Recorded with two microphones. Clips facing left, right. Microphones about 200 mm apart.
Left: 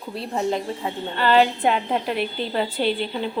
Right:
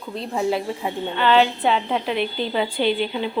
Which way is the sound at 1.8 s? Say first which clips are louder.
Right 1 dB; 5° left (ahead or behind).